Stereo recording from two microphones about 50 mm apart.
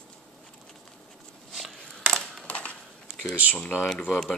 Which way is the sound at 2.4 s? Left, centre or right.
Left.